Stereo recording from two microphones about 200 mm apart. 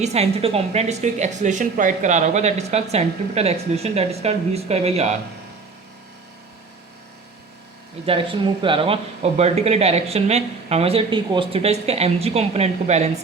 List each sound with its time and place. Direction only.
0.0 s speech: 30° right (ahead or behind)
8.0 s speech: 25° right (ahead or behind)